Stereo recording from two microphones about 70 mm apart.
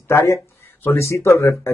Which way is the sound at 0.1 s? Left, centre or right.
Left.